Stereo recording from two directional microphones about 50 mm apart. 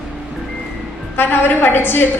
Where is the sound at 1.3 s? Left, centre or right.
Left.